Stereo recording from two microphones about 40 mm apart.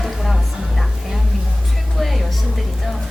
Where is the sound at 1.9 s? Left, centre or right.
Centre.